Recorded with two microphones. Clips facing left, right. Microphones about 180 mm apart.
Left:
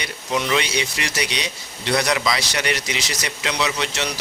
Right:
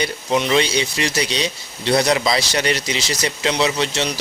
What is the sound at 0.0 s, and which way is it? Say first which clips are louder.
Speech: right 5 dB; 30° right (ahead or behind).